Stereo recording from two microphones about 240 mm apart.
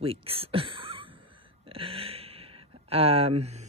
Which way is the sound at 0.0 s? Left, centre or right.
Right.